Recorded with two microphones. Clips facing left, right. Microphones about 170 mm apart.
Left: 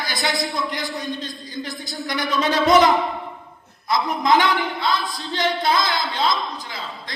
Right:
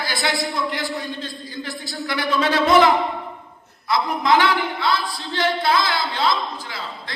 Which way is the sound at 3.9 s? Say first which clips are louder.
Even; 20° left (ahead or behind).